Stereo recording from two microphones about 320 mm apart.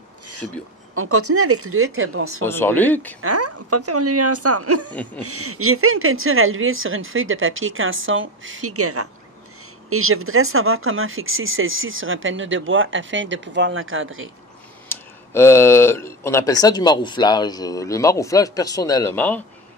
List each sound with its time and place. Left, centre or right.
0.9 s speech: right
2.4 s speech: centre
3.2 s speech: right
14.9 s speech: centre